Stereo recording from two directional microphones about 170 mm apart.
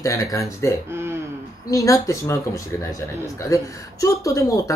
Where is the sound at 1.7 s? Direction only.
20° left (ahead or behind).